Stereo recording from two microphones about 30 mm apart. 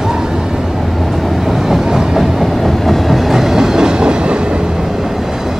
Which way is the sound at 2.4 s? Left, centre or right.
Centre.